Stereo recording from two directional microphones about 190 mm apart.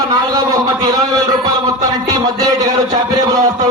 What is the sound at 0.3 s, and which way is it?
A man's voice, 20° right (ahead or behind).